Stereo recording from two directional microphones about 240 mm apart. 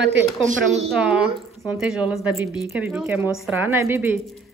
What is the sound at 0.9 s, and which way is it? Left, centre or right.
A woman's voice, centre.